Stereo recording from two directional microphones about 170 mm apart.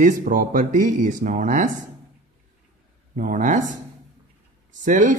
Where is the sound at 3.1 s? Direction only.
50° right (ahead or behind).